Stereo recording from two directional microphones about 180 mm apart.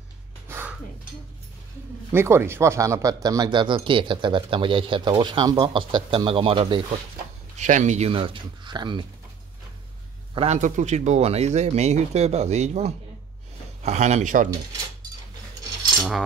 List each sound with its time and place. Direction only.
0.5 s dishes: 10° right (ahead or behind)
2.1 s speech: 15° right (ahead or behind); by 7.0 s 30° right (ahead or behind)
7.5 s speech: 40° right (ahead or behind); by 9.0 s 25° right (ahead or behind)
10.3 s speech: 35° right (ahead or behind)